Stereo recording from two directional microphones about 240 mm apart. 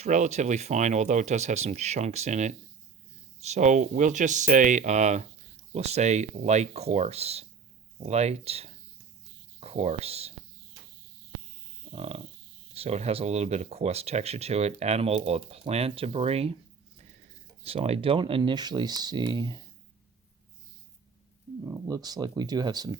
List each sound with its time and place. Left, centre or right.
0.0 s speech: right
11.9 s a sound: right
12.7 s speech: right
17.6 s speech: right
21.6 s speech: centre